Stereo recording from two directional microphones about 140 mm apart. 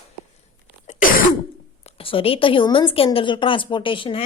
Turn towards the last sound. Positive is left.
turn(degrees=40)  # may be behind; listen again after turning